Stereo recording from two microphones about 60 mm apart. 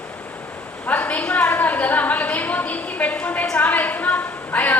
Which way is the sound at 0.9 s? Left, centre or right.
Left.